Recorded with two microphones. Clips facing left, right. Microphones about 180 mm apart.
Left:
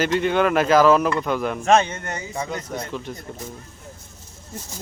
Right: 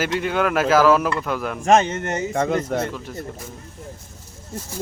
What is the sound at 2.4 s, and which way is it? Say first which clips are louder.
Speech: right 8 dB; 55° right (ahead or behind).